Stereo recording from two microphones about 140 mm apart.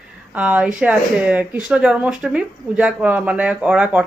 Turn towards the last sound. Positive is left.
turn(degrees=-10)  # may be behind; listen again after turning